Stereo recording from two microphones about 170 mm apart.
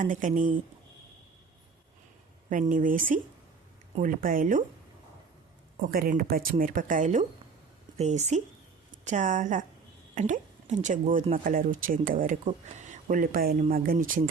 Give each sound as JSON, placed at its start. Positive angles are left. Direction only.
{"t": 0.0, "sound": "speech", "side_deg": -50}
{"t": 2.5, "sound": "speech", "side_deg": -50}
{"t": 5.8, "sound": "a woman's voice", "side_deg": -55}